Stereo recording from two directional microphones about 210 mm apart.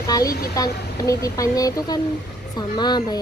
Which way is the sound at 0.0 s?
15° left (ahead or behind).